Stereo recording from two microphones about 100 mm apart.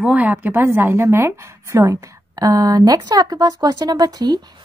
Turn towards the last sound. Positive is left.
turn(degrees=-40)  # may be behind; listen again after turning